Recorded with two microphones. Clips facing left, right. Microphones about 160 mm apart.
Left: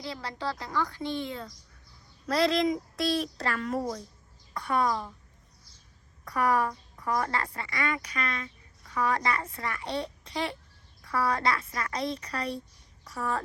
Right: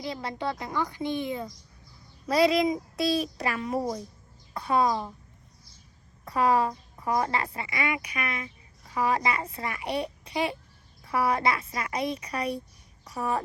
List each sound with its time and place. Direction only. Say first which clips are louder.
0.0 s speech: right 3 dB; 20° right (ahead or behind)
6.2 s speech: right 3 dB; 25° right (ahead or behind)
7.9 s speech: right 1 dB; 10° right (ahead or behind)
8.9 s speech: right 2 dB; 25° right (ahead or behind)